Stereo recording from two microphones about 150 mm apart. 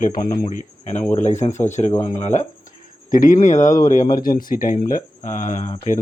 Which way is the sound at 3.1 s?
65° left (ahead or behind).